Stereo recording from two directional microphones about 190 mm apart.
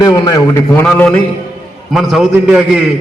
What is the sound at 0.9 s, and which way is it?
A man's voice, 5° left (ahead or behind).